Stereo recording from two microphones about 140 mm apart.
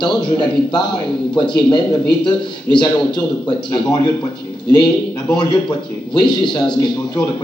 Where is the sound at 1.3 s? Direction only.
30° left (ahead or behind).